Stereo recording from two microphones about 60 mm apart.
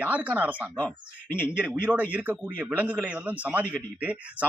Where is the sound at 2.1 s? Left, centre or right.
Right.